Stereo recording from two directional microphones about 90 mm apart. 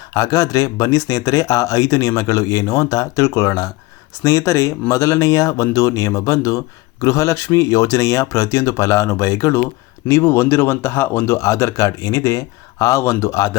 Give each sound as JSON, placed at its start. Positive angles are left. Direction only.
{"t": 0.1, "sound": "speech", "side_deg": 40}